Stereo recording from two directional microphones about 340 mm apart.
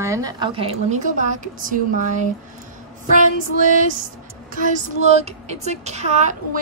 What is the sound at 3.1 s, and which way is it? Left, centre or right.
Speech, right.